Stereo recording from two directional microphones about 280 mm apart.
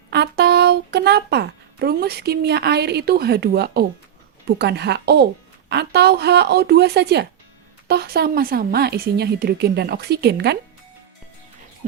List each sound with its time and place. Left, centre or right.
0.1 s a woman's voice: right